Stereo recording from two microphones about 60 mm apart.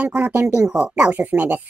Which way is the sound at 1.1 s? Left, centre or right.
Right.